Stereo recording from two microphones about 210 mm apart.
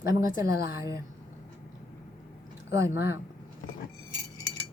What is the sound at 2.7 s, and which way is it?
Speech, 15° right (ahead or behind).